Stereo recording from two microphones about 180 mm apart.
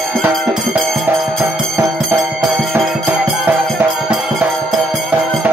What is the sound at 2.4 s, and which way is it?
Music, centre (ahead or behind).